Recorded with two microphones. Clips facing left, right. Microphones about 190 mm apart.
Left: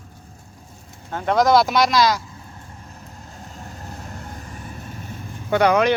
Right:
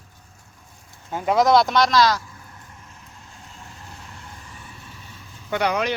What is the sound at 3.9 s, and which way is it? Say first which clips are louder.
Vehicle: left 7 dB; 45° left (ahead or behind).